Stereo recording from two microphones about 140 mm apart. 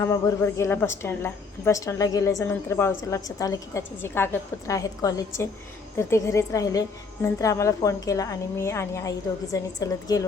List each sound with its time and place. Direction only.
0.0 s a woman's voice: 20° left (ahead or behind)